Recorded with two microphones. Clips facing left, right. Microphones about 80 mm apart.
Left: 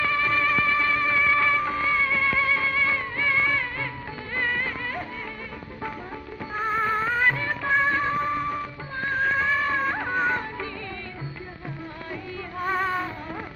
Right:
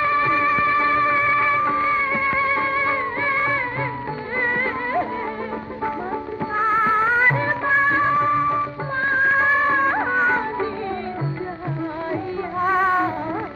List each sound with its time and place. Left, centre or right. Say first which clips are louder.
0.1 s music: right 5 dB; right
1.6 s music of bollywood: right 6 dB; right
2.3 s music: right 4 dB; right
6.8 s music of bollywood: right 3 dB; right
12.1 s music: right 7 dB; right